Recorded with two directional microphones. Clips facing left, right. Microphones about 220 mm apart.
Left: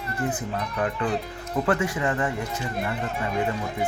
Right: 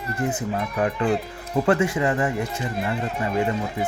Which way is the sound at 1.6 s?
25° right (ahead or behind).